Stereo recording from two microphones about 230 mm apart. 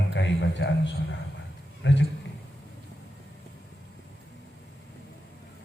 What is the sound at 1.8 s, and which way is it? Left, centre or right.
Speech, left.